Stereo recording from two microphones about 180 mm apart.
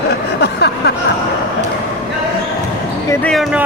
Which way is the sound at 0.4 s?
65° left (ahead or behind).